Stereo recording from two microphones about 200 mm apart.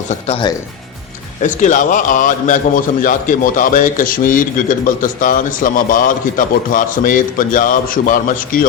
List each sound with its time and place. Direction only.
0.1 s speech: 30° left (ahead or behind)
1.4 s a man's voice: 40° left (ahead or behind)